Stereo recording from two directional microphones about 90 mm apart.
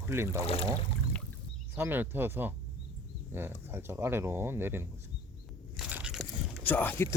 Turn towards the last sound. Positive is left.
turn(degrees=25)  # may be behind; listen again after turning